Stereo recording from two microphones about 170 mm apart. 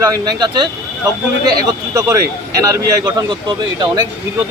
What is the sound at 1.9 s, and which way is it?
Speech, 20° right (ahead or behind).